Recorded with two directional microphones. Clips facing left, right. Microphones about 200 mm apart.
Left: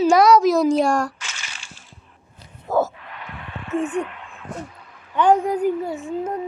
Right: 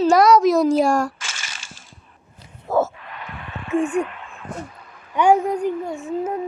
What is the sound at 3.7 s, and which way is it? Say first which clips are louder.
Speech: right 3 dB; 10° right (ahead or behind).